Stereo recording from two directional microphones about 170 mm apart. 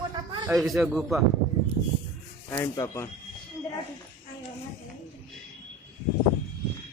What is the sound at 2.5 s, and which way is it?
Speech, 15° left (ahead or behind).